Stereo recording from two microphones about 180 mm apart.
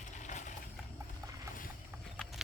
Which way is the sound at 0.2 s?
45° left (ahead or behind).